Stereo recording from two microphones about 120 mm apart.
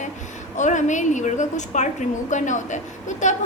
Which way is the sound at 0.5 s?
90° left.